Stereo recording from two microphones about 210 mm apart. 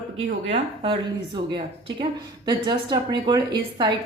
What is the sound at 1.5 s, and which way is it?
A woman's voice, 20° right (ahead or behind).